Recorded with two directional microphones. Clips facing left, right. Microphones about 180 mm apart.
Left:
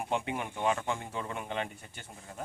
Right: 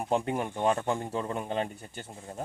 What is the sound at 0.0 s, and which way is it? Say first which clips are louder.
Speech: right 5 dB; 40° right (ahead or behind).